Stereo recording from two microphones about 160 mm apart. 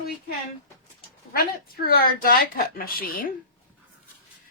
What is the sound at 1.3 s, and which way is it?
Speech, 65° left (ahead or behind).